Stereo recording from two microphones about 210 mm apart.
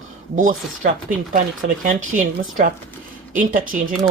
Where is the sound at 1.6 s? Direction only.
40° right (ahead or behind).